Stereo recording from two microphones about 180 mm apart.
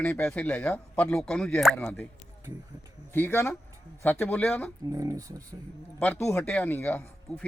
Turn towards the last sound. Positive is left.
turn(degrees=5)  # may be behind; listen again after turning